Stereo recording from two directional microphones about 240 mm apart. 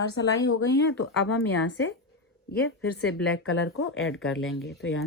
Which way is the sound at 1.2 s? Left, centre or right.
Left.